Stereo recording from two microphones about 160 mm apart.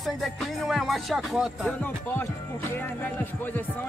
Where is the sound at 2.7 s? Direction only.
10° left (ahead or behind).